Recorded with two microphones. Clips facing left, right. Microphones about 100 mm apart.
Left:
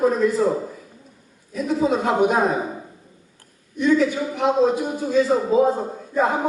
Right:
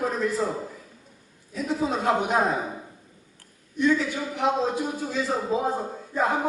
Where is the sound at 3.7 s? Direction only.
15° left (ahead or behind).